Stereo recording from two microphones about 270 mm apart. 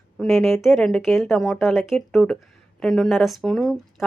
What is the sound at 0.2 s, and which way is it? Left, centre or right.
Speech, centre.